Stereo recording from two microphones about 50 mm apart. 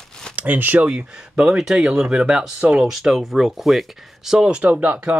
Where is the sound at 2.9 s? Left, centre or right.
Centre.